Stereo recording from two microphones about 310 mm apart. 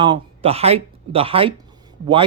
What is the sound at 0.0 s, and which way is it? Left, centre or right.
Speech, centre.